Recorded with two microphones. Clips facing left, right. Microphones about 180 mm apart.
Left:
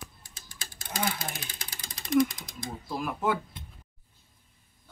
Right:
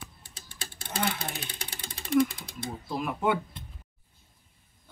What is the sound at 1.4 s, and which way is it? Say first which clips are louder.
Ratchet: right 3 dB; 30° right (ahead or behind).